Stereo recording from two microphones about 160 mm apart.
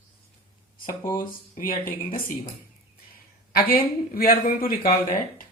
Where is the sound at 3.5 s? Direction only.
65° left (ahead or behind).